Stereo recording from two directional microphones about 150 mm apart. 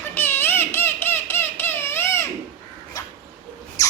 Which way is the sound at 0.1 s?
15° left (ahead or behind).